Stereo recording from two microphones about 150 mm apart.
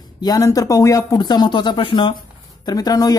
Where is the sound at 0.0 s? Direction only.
25° left (ahead or behind).